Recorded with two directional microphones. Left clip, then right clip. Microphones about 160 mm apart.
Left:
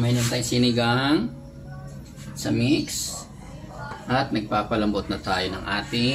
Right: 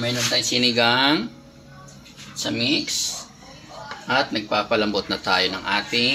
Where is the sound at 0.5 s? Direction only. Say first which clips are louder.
Right 3 dB; 30° right (ahead or behind).